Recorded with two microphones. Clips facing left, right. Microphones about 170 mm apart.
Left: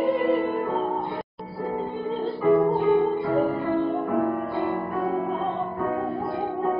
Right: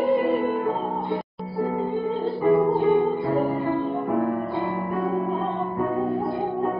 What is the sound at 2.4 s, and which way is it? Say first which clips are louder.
Music: even; 20° right (ahead or behind).